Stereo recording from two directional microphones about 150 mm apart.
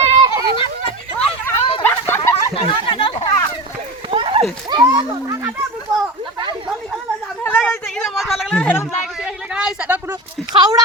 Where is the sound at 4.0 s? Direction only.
35° right (ahead or behind); by 5.5 s 20° right (ahead or behind).